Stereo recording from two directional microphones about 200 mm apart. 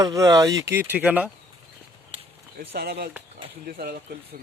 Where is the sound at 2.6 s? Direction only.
50° right (ahead or behind).